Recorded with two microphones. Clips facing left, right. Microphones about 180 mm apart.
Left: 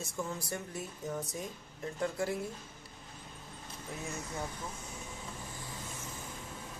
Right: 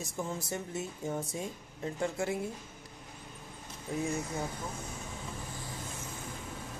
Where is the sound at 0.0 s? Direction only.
20° right (ahead or behind).